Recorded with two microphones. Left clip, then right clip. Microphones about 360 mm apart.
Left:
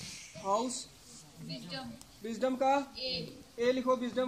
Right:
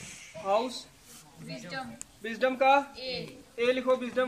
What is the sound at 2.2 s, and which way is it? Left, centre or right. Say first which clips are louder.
A man's voice: right 6 dB; right.